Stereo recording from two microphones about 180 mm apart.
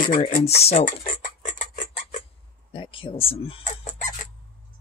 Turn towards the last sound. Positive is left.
turn(degrees=40)  # may be behind; listen again after turning